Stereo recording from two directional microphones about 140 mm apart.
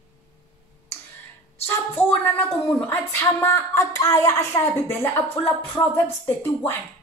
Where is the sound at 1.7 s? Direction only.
20° left (ahead or behind).